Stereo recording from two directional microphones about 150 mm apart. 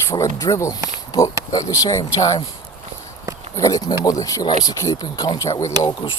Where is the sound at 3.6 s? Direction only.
25° left (ahead or behind).